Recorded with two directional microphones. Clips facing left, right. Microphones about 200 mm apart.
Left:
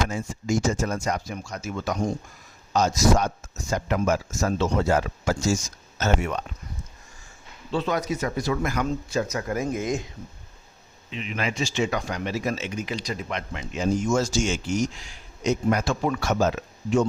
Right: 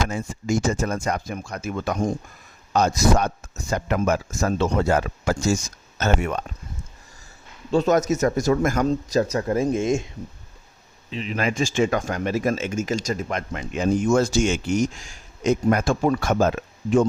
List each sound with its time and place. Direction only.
0.1 s speech: 60° right (ahead or behind)
7.7 s a man's voice: 45° right (ahead or behind); by 10.1 s 25° right (ahead or behind)
11.1 s a man's voice: 35° right (ahead or behind)
11.4 s speech: 50° right (ahead or behind)